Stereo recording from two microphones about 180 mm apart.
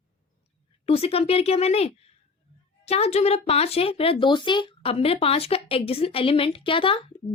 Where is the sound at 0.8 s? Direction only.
35° left (ahead or behind).